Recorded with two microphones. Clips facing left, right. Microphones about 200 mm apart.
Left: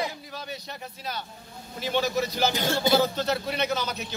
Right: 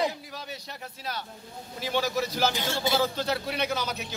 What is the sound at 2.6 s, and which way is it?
Speech, 40° left (ahead or behind).